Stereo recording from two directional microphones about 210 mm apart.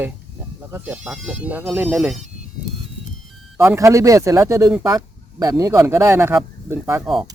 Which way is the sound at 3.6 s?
15° right (ahead or behind).